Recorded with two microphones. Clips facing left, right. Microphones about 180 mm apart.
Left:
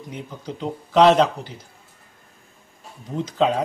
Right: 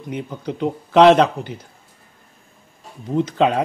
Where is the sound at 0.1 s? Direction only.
65° right (ahead or behind).